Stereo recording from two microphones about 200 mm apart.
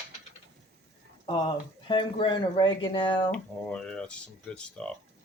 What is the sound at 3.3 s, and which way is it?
Speech, 5° left (ahead or behind).